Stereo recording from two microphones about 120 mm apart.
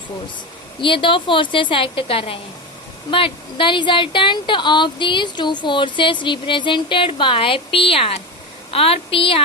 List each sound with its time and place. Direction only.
0.8 s speech: 45° left (ahead or behind)